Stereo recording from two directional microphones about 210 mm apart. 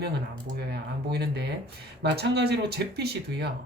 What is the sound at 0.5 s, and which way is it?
Speech, 50° right (ahead or behind).